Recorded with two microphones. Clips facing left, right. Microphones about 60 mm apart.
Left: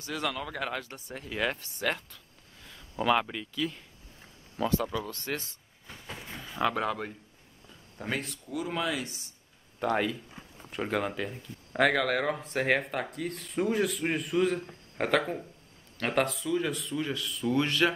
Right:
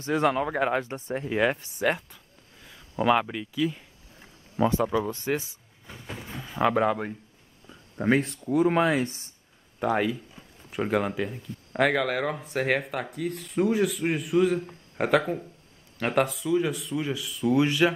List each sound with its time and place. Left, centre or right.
0.0 s speech: right; by 3.8 s centre
4.6 s speech: right
9.8 s speech: centre